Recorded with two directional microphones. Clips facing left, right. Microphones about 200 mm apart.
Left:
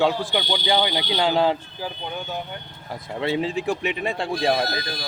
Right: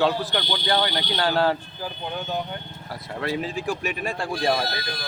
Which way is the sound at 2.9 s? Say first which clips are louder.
Left 3 dB; 20° left (ahead or behind).